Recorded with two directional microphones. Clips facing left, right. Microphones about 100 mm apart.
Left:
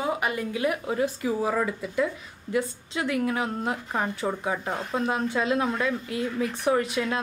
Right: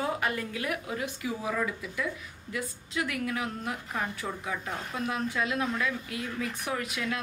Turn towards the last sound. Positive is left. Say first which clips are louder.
# left 8 dB
turn(degrees=30)  # may be behind; listen again after turning